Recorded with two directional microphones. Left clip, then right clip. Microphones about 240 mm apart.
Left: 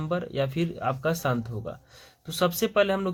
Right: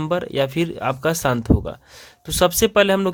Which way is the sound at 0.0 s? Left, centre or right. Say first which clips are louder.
Right 8 dB; right.